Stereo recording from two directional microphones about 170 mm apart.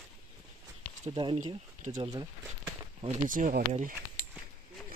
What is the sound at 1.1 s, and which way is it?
Speech, 30° right (ahead or behind).